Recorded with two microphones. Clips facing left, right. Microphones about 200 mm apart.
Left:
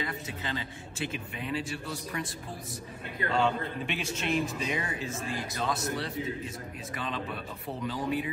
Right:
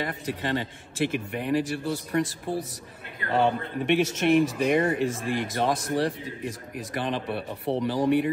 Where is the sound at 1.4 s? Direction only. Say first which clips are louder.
Right 8 dB; 65° right (ahead or behind).